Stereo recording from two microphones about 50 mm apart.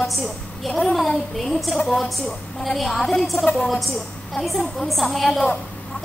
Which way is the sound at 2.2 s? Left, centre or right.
Centre.